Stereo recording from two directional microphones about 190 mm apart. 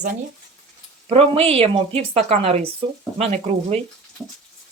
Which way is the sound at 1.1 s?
30° right (ahead or behind).